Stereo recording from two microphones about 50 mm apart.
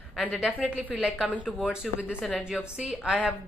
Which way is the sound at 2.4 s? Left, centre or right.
Centre.